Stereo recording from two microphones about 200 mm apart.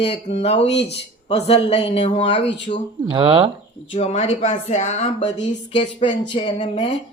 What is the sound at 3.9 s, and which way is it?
Speech, 30° left (ahead or behind).